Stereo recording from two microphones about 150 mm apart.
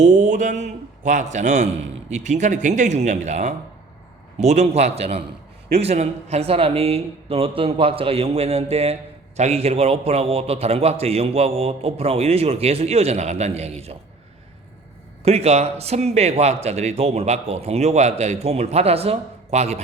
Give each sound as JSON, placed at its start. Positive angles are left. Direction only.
{"t": 0.0, "sound": "a man's voice", "side_deg": -55}
{"t": 15.2, "sound": "speech", "side_deg": -45}